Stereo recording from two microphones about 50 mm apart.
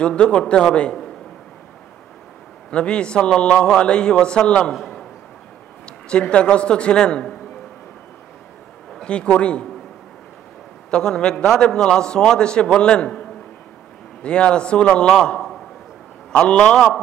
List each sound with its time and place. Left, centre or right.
0.0 s a man's voice: centre
2.7 s a man's voice: left
4.7 s a sound: centre
5.9 s a man's voice: centre
9.0 s a man's voice: left
10.9 s a man's voice: centre
14.2 s a man's voice: left